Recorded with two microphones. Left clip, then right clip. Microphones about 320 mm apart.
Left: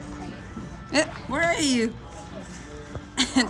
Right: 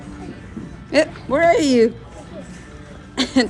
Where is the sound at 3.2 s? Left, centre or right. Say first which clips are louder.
Right 5 dB; centre.